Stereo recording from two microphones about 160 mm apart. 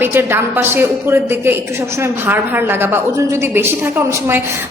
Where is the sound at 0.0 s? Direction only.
15° right (ahead or behind).